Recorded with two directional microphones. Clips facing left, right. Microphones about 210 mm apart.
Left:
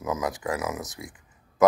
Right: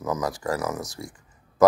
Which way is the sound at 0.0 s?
Centre (ahead or behind).